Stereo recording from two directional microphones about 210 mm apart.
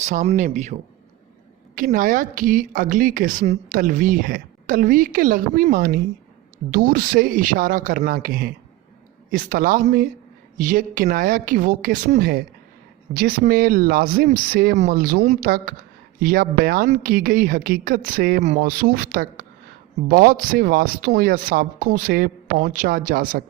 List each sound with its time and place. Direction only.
0.0 s a woman's voice: 35° right (ahead or behind)